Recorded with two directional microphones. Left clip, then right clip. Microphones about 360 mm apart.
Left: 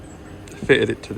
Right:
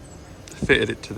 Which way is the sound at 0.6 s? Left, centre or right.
Centre.